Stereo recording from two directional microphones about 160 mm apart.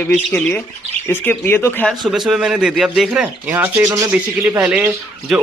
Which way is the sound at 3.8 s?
20° right (ahead or behind).